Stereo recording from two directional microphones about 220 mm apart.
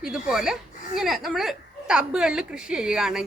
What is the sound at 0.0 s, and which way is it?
A woman's voice, 5° right (ahead or behind).